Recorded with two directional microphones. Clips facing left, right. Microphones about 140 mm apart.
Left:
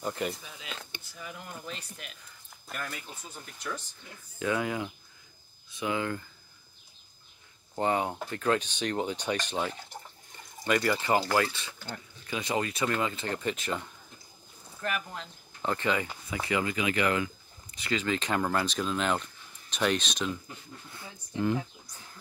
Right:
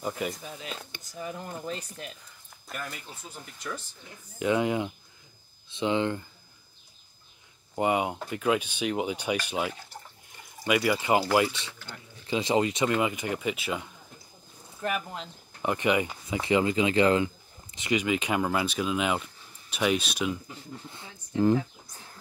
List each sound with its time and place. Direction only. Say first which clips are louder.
0.0 s speech: right 1 dB; centre (ahead or behind)
0.4 s speech: right 4 dB; 40° right (ahead or behind)
2.7 s speech: even; centre (ahead or behind)
4.4 s speech: right 4 dB; 20° right (ahead or behind)
7.7 s speech: right 2 dB; 10° right (ahead or behind)
14.8 s speech: right 3 dB; 20° right (ahead or behind)
20.9 s speech: right 4 dB; 25° right (ahead or behind)